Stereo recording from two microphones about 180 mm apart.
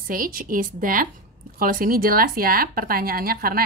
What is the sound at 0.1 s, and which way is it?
Speech, 50° right (ahead or behind).